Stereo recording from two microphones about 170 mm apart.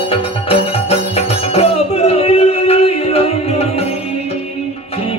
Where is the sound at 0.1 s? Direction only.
35° left (ahead or behind).